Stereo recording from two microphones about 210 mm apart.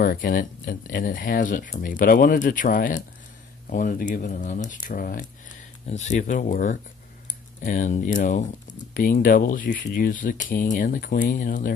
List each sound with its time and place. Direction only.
0.0 s speech: 40° left (ahead or behind)